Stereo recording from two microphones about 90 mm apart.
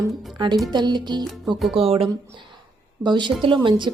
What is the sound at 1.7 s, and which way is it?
Speech, 90° right.